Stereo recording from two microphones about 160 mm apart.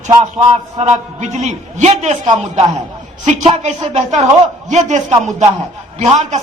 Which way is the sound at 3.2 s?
45° right (ahead or behind).